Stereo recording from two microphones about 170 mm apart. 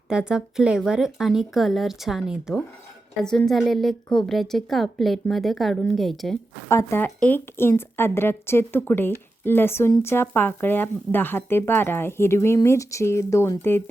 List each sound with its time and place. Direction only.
0.1 s a woman's voice: 5° right (ahead or behind)
6.7 s a woman's voice: 15° left (ahead or behind)